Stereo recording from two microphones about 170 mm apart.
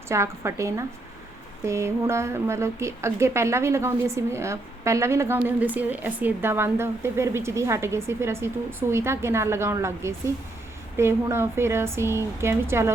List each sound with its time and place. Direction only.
0.1 s speech: 15° right (ahead or behind)